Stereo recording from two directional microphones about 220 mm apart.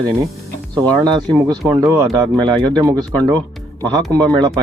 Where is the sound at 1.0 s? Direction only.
15° right (ahead or behind).